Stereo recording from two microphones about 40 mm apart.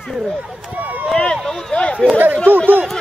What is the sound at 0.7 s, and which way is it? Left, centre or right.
Speech, right.